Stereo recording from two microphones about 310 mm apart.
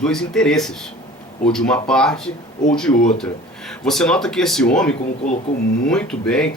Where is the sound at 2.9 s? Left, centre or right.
Left.